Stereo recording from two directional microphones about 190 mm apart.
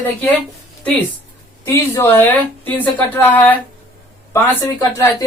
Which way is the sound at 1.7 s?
15° left (ahead or behind).